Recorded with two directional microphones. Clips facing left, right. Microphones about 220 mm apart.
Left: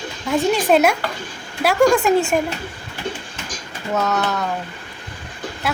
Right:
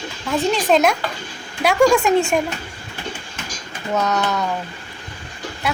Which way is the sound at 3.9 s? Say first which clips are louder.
Even; centre (ahead or behind).